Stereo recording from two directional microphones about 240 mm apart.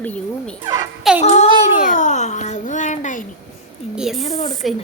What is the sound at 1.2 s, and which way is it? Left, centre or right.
Speech, left.